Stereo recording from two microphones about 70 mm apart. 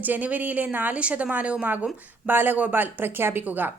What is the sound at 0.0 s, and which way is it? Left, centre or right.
Speech, right.